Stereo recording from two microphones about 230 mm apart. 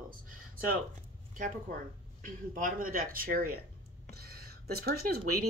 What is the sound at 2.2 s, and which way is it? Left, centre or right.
Speech, right.